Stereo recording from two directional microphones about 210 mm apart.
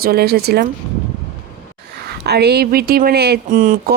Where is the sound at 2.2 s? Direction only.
50° right (ahead or behind).